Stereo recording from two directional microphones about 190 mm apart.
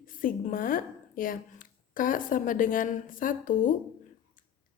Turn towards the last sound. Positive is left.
turn(degrees=45)  # may be behind; listen again after turning